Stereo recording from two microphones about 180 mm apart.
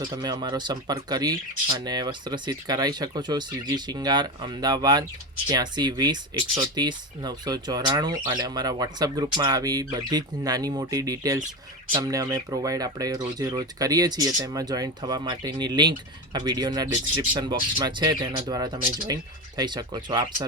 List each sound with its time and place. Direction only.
0.0 s speech: 25° right (ahead or behind)